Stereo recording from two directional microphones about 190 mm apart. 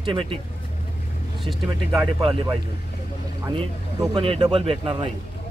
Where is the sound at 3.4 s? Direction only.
20° right (ahead or behind).